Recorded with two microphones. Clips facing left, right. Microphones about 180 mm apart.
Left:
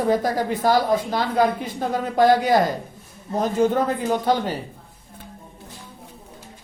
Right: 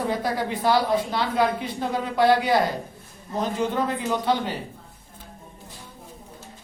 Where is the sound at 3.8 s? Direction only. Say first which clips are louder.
Left 3 dB; 45° left (ahead or behind).